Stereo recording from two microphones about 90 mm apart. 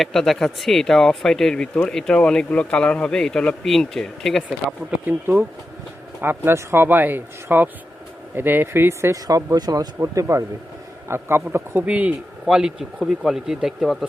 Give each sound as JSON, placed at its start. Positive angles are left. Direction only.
{"t": 0.0, "sound": "speech", "side_deg": 0}
{"t": 5.0, "sound": "speech", "side_deg": -25}
{"t": 9.2, "sound": "speech", "side_deg": -45}